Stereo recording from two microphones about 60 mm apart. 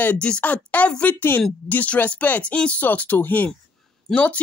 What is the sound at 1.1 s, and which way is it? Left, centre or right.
A woman's voice, left.